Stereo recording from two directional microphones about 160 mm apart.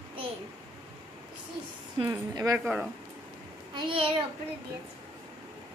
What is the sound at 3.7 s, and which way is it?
Speech, 35° right (ahead or behind).